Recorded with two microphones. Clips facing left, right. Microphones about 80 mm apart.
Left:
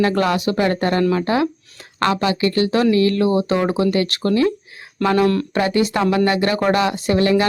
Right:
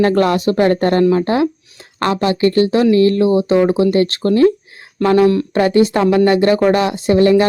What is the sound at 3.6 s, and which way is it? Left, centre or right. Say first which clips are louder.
Speech: right 6 dB; left.